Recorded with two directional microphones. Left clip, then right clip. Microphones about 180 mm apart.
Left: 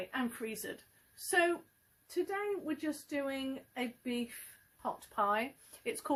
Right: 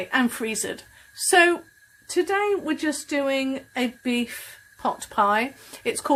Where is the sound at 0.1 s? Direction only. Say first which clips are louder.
Right 15 dB; 20° right (ahead or behind).